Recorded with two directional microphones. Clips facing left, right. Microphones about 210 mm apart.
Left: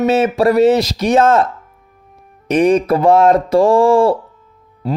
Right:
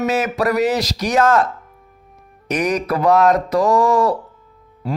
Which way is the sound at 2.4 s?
25° left (ahead or behind).